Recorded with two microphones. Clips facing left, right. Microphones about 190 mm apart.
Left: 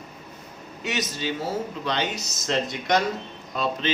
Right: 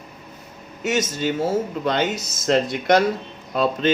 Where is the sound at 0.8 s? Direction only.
45° right (ahead or behind).